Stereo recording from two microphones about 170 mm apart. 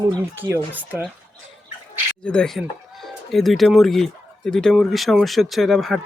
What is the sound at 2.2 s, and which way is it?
Speech, 5° left (ahead or behind).